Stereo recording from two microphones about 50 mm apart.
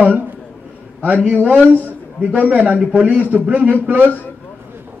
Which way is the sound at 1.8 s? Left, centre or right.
Right.